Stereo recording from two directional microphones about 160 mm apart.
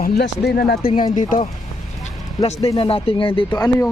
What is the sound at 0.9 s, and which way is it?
Speech, 30° left (ahead or behind).